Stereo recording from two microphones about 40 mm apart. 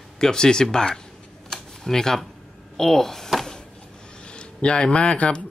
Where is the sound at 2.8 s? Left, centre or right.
Centre.